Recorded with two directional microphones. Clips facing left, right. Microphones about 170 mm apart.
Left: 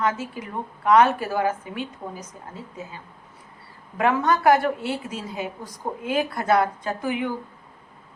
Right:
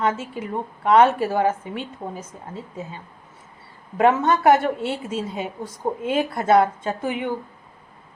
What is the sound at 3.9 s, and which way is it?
A woman's voice, 25° right (ahead or behind).